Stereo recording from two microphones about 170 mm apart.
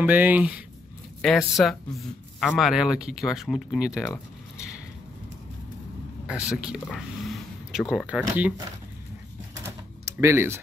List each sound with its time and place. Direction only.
0.0 s speech: 10° right (ahead or behind)
6.2 s speech: 5° right (ahead or behind)
10.0 s speech: 15° right (ahead or behind)